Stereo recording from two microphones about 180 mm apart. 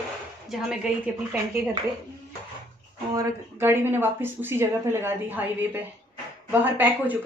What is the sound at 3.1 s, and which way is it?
Speech, 15° right (ahead or behind).